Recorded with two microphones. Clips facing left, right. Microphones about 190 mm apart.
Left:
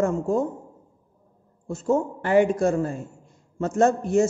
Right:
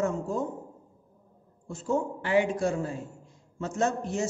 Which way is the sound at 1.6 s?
45° left (ahead or behind).